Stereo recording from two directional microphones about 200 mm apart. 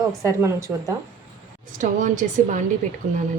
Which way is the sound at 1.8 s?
40° right (ahead or behind).